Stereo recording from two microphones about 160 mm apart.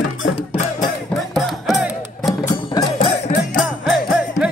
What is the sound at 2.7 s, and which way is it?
Music, 35° left (ahead or behind).